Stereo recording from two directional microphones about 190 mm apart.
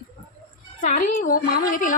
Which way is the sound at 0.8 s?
40° left (ahead or behind).